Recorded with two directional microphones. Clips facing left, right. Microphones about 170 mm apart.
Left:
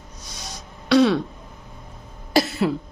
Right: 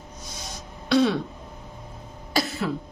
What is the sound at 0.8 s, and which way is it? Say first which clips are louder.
Throat clearing: left 4 dB; 85° left.